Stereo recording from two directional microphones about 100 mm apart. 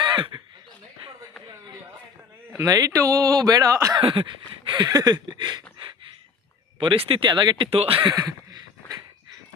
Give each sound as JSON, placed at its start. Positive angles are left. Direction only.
{"t": 0.0, "sound": "speech", "side_deg": -50}
{"t": 2.6, "sound": "speech", "side_deg": -35}
{"t": 3.9, "sound": "speech", "side_deg": -60}
{"t": 6.7, "sound": "speech", "side_deg": -65}
{"t": 7.3, "sound": "speech", "side_deg": -45}
{"t": 7.6, "sound": "speech", "side_deg": -70}
{"t": 8.0, "sound": "speech", "side_deg": -40}